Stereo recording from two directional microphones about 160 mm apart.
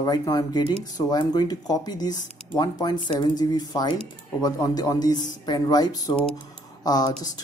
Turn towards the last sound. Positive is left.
turn(degrees=25)  # may be behind; listen again after turning